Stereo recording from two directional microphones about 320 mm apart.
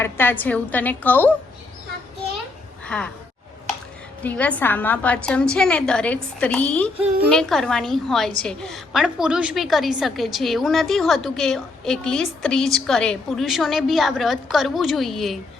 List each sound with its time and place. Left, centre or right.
0.0 s a woman's voice: centre
2.8 s speech: centre
4.2 s a woman's voice: centre